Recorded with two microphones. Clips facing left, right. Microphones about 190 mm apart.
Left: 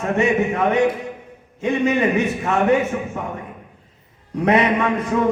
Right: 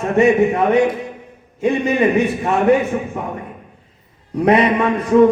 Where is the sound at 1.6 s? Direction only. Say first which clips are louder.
Right 3 dB; 35° right (ahead or behind).